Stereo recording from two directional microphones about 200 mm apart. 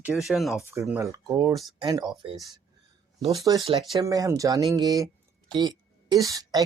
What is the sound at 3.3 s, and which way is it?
A woman's voice, 20° right (ahead or behind).